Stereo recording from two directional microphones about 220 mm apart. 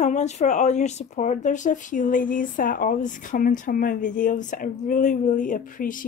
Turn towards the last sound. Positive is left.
turn(degrees=35)  # may be behind; listen again after turning